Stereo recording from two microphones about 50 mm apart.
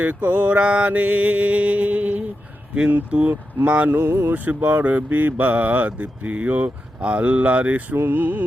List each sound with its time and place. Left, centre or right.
0.0 s speech: right
3.8 s speech: right
4.4 s speech: right
7.9 s music: right